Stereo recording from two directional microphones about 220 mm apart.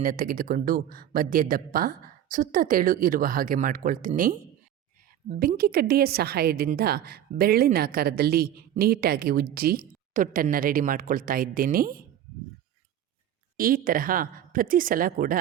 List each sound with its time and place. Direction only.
0.0 s a woman's voice: 40° right (ahead or behind)
13.6 s speech: 40° right (ahead or behind)